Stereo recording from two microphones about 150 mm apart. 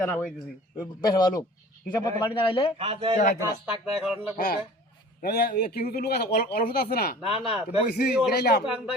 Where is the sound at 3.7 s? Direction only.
5° right (ahead or behind).